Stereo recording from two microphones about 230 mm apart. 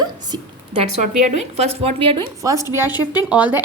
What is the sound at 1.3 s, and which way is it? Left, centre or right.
A woman's voice, right.